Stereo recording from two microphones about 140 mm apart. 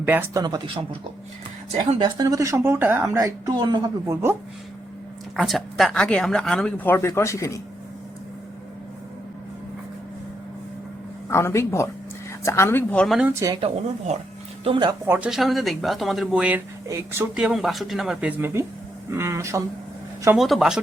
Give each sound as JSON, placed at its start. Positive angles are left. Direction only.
{"t": 0.0, "sound": "speech", "side_deg": -15}
{"t": 0.4, "sound": "speech", "side_deg": -35}
{"t": 2.0, "sound": "speech", "side_deg": -30}
{"t": 5.4, "sound": "speech", "side_deg": 0}
{"t": 11.3, "sound": "speech", "side_deg": 20}
{"t": 13.6, "sound": "speech", "side_deg": -45}
{"t": 15.0, "sound": "speech", "side_deg": -15}
{"t": 15.3, "sound": "speech", "side_deg": 0}
{"t": 16.9, "sound": "speech", "side_deg": -20}
{"t": 17.3, "sound": "speech", "side_deg": -5}
{"t": 20.3, "sound": "speech", "side_deg": 0}